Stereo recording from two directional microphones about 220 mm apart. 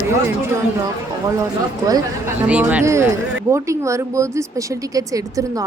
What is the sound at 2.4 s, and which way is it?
Speech, 5° right (ahead or behind).